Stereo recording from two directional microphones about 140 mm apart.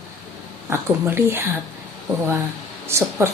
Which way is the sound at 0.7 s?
15° right (ahead or behind).